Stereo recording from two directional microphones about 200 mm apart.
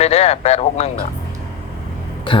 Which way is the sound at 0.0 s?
30° left (ahead or behind).